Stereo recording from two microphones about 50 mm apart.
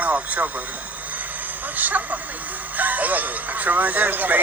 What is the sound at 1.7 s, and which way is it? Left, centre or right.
Speech, right.